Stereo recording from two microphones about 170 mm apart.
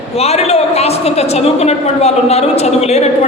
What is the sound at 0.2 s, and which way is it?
A man's voice, 40° left (ahead or behind).